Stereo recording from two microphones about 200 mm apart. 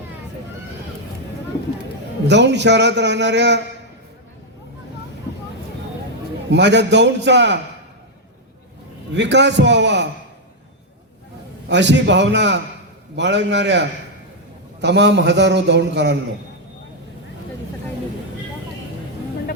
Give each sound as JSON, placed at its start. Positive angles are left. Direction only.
{"t": 2.2, "sound": "a man's voice", "side_deg": -60}
{"t": 6.5, "sound": "a man's voice", "side_deg": -60}
{"t": 9.1, "sound": "a man's voice", "side_deg": -60}
{"t": 11.7, "sound": "a man's voice", "side_deg": -60}